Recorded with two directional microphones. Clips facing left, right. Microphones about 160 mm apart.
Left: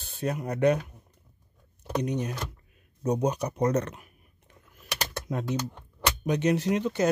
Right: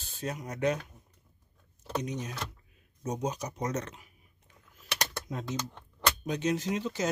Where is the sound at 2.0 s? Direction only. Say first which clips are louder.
Left 6 dB; 60° left (ahead or behind).